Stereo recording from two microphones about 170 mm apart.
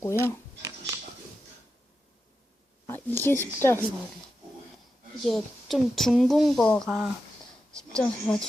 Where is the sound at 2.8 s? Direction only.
15° left (ahead or behind).